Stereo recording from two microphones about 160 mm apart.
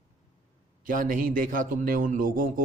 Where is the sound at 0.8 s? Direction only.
60° right (ahead or behind).